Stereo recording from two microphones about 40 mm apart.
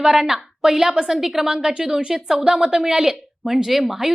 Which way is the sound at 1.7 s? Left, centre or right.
Centre.